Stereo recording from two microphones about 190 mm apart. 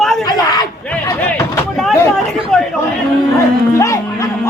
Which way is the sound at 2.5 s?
Centre (ahead or behind).